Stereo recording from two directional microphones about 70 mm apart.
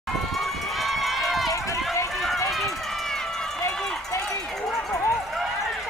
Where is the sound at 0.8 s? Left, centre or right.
Centre.